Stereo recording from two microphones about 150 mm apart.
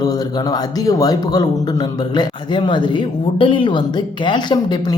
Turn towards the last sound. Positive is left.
turn(degrees=30)  # may be behind; listen again after turning